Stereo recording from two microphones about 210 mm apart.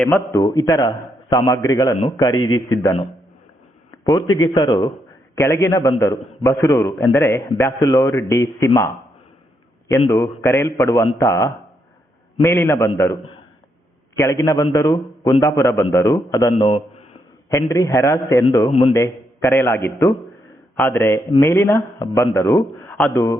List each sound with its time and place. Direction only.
0.0 s a man's voice: 10° left (ahead or behind)
3.9 s a sound: 15° left (ahead or behind)
4.4 s a man's voice: 20° left (ahead or behind)
10.1 s a man's voice: 15° left (ahead or behind)
14.2 s a man's voice: 15° left (ahead or behind)
18.7 s a man's voice: 30° left (ahead or behind)
18.9 s a man's voice: 15° left (ahead or behind)